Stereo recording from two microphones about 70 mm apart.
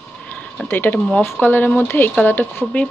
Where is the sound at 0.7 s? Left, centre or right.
Left.